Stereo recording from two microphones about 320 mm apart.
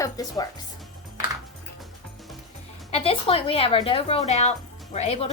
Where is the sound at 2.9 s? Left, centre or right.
Centre.